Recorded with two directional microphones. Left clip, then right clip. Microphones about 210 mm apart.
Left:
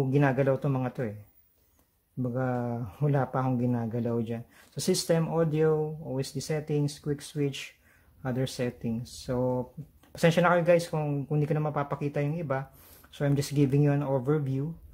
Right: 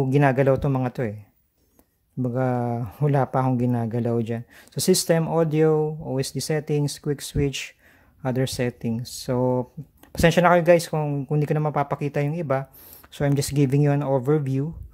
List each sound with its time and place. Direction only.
0.0 s speech: 25° right (ahead or behind)
2.2 s speech: 25° right (ahead or behind)